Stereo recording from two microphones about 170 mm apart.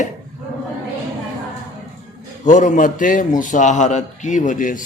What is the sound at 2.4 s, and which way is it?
A man's voice, 50° left (ahead or behind).